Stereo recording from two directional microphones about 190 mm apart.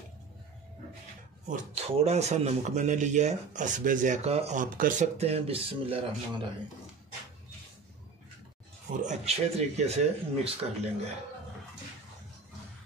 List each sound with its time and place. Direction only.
1.5 s a man's voice: 35° right (ahead or behind)
9.0 s a man's voice: 35° right (ahead or behind)